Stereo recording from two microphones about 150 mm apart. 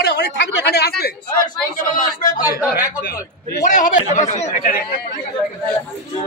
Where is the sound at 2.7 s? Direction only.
90° left.